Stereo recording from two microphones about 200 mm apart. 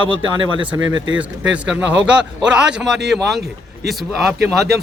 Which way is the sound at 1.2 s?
5° right (ahead or behind).